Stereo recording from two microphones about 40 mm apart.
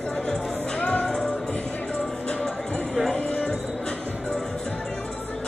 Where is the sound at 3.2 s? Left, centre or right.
Left.